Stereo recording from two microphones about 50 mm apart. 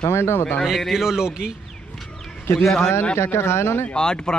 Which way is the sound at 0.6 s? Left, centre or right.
Centre.